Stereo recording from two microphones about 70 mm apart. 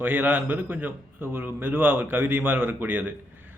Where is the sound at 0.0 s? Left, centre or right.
Right.